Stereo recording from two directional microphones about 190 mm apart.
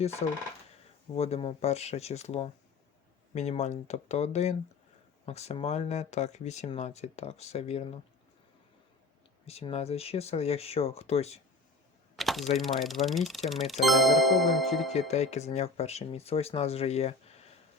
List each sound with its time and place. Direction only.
1.1 s speech: 30° left (ahead or behind)
9.5 s speech: 35° left (ahead or behind)
12.1 s mechanisms: centre (ahead or behind)
12.5 s speech: centre (ahead or behind)
14.9 s speech: 35° left (ahead or behind)